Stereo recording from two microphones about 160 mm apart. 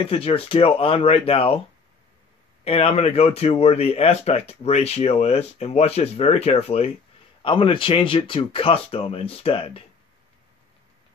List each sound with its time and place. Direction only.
0.0 s speech: 35° left (ahead or behind)
2.6 s speech: 40° left (ahead or behind)